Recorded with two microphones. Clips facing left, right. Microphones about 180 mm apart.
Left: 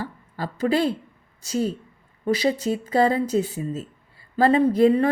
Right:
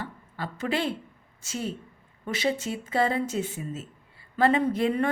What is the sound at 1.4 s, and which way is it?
A woman's voice, 40° left (ahead or behind).